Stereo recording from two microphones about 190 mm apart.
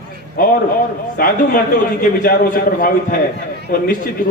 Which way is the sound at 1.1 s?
50° left (ahead or behind).